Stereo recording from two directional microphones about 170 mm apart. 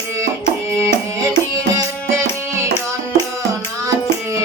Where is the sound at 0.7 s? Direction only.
15° right (ahead or behind).